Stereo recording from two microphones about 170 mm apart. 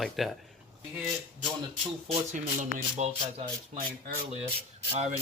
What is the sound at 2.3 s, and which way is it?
Speech, 45° right (ahead or behind).